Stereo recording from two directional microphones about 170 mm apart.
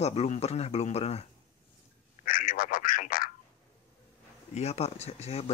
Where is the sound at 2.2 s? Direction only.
55° left (ahead or behind).